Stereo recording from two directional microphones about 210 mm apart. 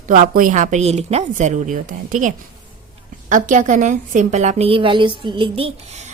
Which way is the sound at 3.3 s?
35° right (ahead or behind).